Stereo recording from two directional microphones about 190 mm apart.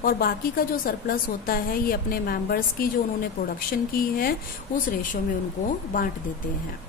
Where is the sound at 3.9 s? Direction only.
50° left (ahead or behind).